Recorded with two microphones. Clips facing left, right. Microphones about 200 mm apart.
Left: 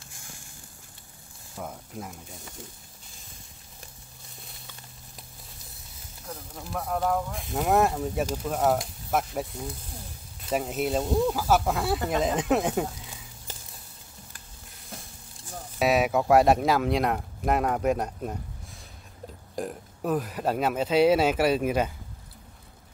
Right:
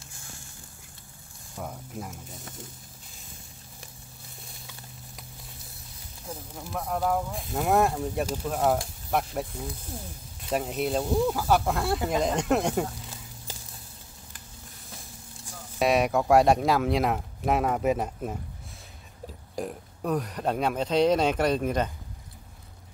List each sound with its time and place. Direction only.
1.5 s speech: centre (ahead or behind)
6.2 s speech: 5° right (ahead or behind)
15.8 s speech: centre (ahead or behind)
19.5 s speech: centre (ahead or behind)